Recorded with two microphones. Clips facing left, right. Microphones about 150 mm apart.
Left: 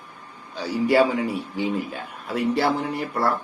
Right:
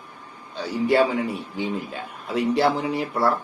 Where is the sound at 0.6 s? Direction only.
Centre (ahead or behind).